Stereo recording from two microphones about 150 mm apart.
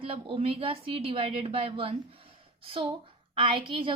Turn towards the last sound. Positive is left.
turn(degrees=-35)  # may be behind; listen again after turning